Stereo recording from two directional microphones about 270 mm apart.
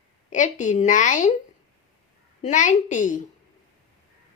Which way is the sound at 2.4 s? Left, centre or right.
Left.